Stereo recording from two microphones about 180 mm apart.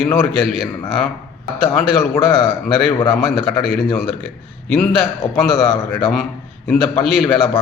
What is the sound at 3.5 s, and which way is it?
Speech, 5° left (ahead or behind).